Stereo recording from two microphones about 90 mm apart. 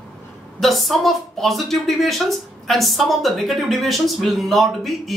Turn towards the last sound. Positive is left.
turn(degrees=0)  # may be behind; listen again after turning